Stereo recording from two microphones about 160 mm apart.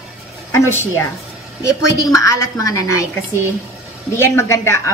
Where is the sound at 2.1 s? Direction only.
20° left (ahead or behind).